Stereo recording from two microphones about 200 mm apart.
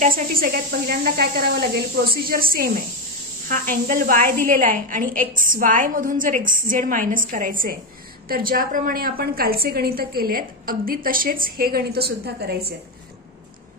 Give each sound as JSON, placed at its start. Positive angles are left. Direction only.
{"t": 0.0, "sound": "a woman's voice", "side_deg": -45}